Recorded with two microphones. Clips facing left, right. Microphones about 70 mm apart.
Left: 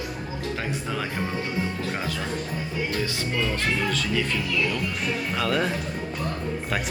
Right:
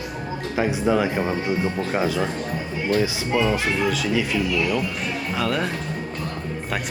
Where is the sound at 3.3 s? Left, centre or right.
Right.